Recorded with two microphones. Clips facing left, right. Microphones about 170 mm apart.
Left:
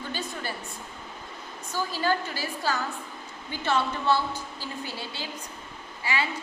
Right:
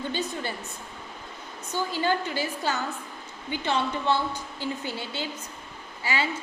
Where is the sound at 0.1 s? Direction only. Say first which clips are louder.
Right 3 dB; 20° right (ahead or behind).